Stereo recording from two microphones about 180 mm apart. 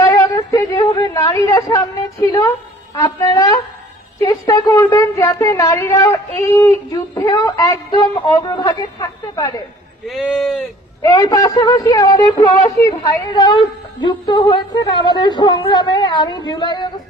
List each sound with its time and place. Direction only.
0.0 s yodeling: 15° left (ahead or behind)
0.9 s a woman's voice: 15° left (ahead or behind)
10.1 s speech: centre (ahead or behind)
11.0 s a woman's voice: 20° left (ahead or behind)